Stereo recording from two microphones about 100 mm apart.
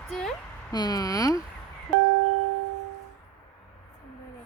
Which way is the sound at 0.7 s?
40° left (ahead or behind).